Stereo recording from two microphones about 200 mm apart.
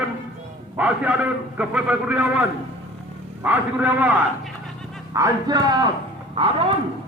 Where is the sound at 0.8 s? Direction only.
10° right (ahead or behind).